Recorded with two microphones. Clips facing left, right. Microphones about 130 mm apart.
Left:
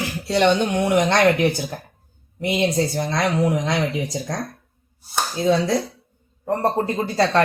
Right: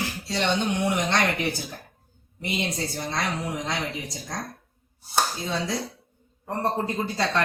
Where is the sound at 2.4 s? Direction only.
90° left.